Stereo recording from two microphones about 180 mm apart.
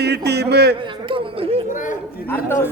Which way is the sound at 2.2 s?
10° left (ahead or behind).